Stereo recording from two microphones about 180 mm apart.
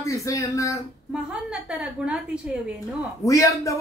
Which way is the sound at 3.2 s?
15° left (ahead or behind).